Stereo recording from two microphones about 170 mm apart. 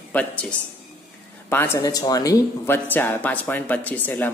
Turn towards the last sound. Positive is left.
turn(degrees=10)  # may be behind; listen again after turning